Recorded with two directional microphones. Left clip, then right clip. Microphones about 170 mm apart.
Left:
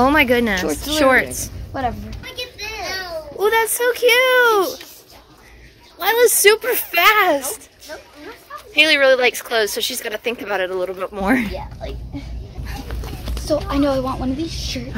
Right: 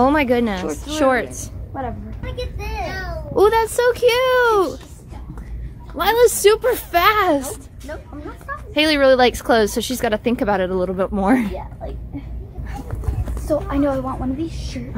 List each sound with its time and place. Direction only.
0.0 s a woman's voice: 10° right (ahead or behind)
3.3 s speech: 10° right (ahead or behind)
5.9 s a woman's voice: 10° right (ahead or behind)
8.7 s speech: 15° right (ahead or behind)
12.8 s clip-clop: centre (ahead or behind)
13.7 s a woman's voice: 30° left (ahead or behind)